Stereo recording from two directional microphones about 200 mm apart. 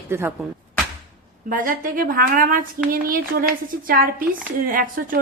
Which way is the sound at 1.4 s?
40° right (ahead or behind).